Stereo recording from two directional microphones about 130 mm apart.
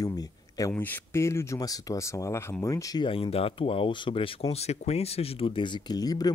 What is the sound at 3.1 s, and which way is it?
Speech, 45° left (ahead or behind).